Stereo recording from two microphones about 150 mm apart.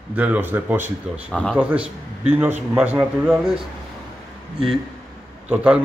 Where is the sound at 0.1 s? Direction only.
10° right (ahead or behind).